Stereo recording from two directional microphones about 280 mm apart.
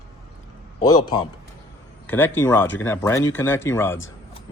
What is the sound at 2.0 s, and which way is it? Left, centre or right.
Speech, centre.